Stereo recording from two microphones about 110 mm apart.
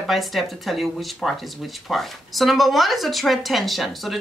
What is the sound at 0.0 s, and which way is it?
A woman's voice, centre (ahead or behind).